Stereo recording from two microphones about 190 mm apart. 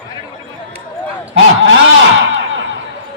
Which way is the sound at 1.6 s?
80° right.